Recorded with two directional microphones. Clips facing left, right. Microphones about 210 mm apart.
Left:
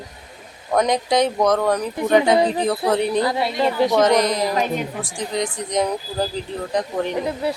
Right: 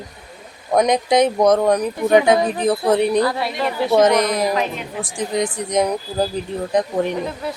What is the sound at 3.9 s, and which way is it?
Speech, 20° right (ahead or behind).